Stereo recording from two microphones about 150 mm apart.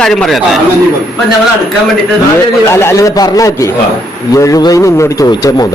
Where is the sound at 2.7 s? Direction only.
15° left (ahead or behind).